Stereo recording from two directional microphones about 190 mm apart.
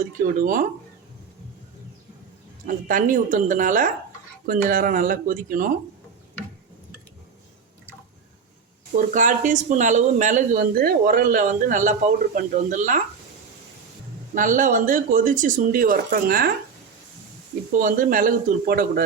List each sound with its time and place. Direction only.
0.0 s speech: 45° right (ahead or behind)
2.6 s speech: 45° right (ahead or behind)
9.1 s speech: 40° right (ahead or behind)
14.3 s speech: 45° right (ahead or behind)
17.7 s speech: 45° right (ahead or behind)